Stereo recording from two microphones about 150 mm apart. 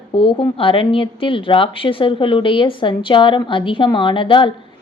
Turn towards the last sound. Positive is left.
turn(degrees=35)  # may be behind; listen again after turning